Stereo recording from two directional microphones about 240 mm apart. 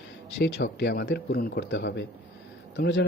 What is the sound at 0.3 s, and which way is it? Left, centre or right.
A man's voice, left.